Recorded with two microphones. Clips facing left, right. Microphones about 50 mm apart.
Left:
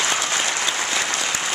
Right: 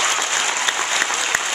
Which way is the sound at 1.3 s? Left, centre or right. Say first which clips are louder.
Right 4 dB; right.